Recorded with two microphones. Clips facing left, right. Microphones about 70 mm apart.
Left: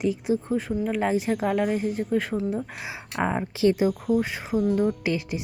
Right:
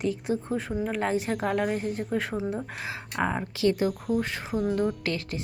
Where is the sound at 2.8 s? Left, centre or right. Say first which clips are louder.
Right 1 dB; centre.